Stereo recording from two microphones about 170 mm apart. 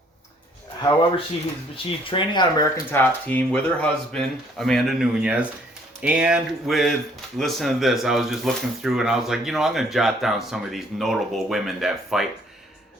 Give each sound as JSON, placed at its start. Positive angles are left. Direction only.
{"t": 0.8, "sound": "speech", "side_deg": 25}
{"t": 3.0, "sound": "speech", "side_deg": 10}